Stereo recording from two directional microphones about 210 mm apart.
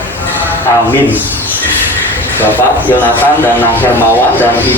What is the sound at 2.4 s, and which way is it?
Speech, 10° left (ahead or behind).